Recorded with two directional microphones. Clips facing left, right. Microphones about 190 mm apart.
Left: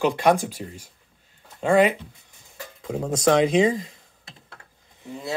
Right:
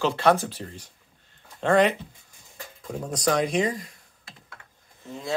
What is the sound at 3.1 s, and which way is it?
Speech, 25° left (ahead or behind).